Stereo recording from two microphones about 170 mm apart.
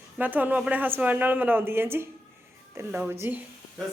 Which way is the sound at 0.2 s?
10° right (ahead or behind).